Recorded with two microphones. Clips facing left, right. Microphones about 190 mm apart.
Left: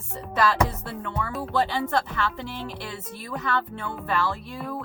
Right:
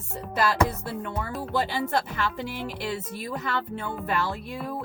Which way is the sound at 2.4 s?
15° right (ahead or behind).